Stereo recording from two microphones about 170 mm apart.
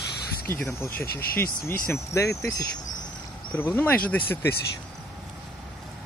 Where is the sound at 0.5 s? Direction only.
15° left (ahead or behind).